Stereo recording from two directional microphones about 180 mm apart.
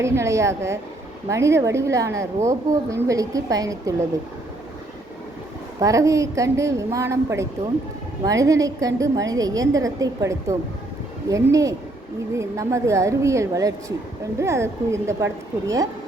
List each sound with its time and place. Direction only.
0.0 s a woman's voice: 15° right (ahead or behind)
5.8 s a woman's voice: 15° right (ahead or behind)